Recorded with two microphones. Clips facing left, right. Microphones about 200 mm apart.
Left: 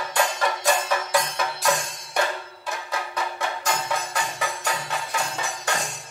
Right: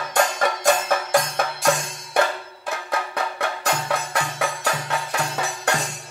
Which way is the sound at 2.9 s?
60° right (ahead or behind).